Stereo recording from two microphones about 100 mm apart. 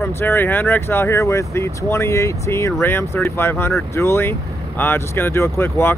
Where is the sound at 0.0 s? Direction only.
20° left (ahead or behind).